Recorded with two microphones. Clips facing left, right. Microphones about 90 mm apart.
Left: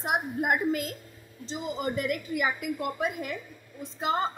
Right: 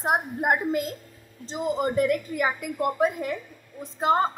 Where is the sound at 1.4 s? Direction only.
45° right (ahead or behind).